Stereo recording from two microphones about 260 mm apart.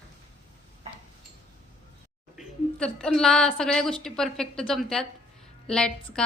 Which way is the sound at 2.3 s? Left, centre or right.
Centre.